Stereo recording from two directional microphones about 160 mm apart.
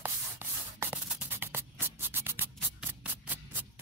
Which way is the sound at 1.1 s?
15° right (ahead or behind).